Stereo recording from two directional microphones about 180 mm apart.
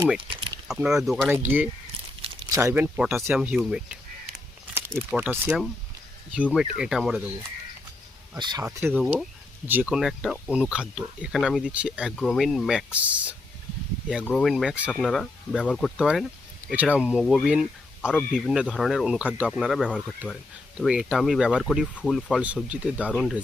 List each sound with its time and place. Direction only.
0.7 s speech: 5° right (ahead or behind)
5.1 s speech: 10° right (ahead or behind)
8.4 s speech: 25° right (ahead or behind)
8.9 s speech: centre (ahead or behind)
14.3 s speech: 5° left (ahead or behind)
18.1 s speech: 10° left (ahead or behind)
18.5 s speech: 5° right (ahead or behind)